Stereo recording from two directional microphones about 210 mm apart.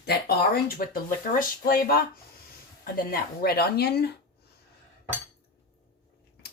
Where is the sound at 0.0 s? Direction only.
50° left (ahead or behind).